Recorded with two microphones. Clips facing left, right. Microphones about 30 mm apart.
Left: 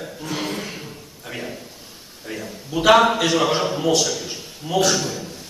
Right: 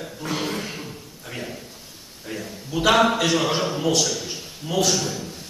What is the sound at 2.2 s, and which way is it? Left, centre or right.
A man's voice, centre.